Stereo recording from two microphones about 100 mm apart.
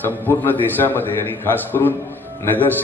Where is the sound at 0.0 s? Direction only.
20° left (ahead or behind).